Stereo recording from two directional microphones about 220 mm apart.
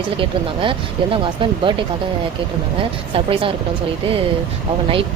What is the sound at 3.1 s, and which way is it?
Speech, 25° right (ahead or behind).